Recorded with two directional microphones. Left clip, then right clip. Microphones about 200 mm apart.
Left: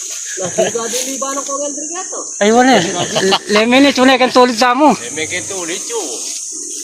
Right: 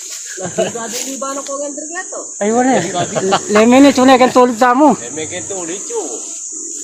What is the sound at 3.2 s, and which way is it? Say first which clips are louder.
Speech: left 2 dB; 50° right (ahead or behind).